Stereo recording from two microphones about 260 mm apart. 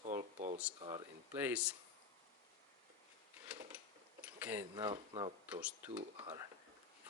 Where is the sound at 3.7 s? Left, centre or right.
Centre.